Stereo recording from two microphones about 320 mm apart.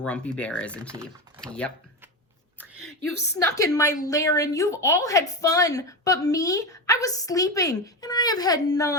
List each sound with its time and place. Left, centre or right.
0.0 s speech: centre
0.9 s speech: centre
1.4 s speech: centre
2.7 s a woman's voice: left
3.3 s a woman's voice: centre